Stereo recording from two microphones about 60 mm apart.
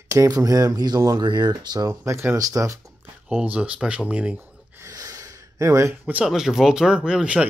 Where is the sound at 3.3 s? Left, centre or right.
Right.